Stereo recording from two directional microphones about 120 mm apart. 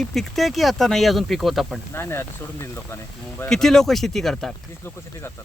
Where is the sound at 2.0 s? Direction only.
20° left (ahead or behind).